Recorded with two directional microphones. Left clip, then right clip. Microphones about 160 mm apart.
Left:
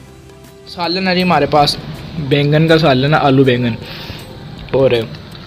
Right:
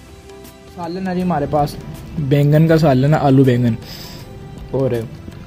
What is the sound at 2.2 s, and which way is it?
A man's voice, 40° right (ahead or behind).